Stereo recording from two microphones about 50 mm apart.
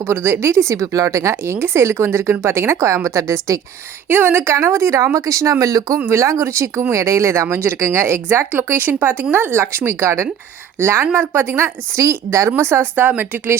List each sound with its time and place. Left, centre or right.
0.0 s speech: right
4.1 s speech: right
4.5 s speech: right
5.1 s speech: right
6.9 s speech: right
7.5 s speech: right
10.8 s speech: right
11.9 s speech: right
13.0 s speech: right